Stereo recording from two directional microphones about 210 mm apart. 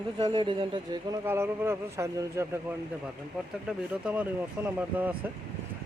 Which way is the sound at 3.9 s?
5° right (ahead or behind).